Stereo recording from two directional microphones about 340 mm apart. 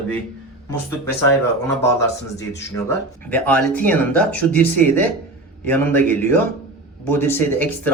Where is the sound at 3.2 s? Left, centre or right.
Centre.